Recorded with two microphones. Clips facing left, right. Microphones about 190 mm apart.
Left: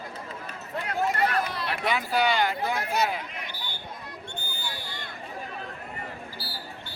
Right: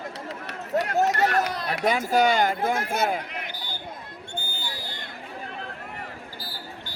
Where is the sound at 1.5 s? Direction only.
40° right (ahead or behind).